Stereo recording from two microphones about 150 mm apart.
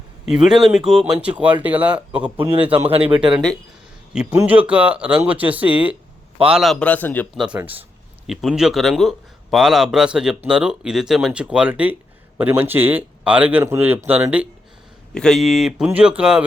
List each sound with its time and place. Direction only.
0.3 s speech: 5° right (ahead or behind)
2.9 s speech: 35° right (ahead or behind)
4.1 s a man's voice: 10° right (ahead or behind); by 7.3 s 10° left (ahead or behind)
7.3 s speech: 10° right (ahead or behind)
8.3 s speech: centre (ahead or behind)
15.1 s speech: 5° left (ahead or behind)